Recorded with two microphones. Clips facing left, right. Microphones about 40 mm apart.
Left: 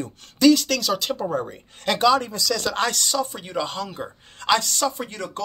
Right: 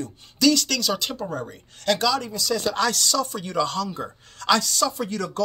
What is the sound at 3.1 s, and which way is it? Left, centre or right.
Speech, left.